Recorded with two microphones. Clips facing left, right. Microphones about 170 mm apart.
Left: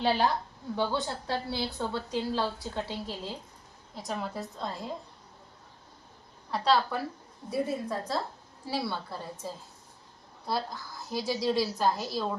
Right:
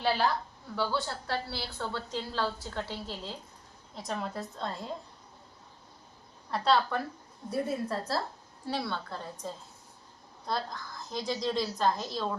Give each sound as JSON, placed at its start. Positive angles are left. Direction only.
{"t": 0.0, "sound": "a woman's voice", "side_deg": 20}
{"t": 3.9, "sound": "a woman's voice", "side_deg": 0}
{"t": 6.5, "sound": "a woman's voice", "side_deg": 0}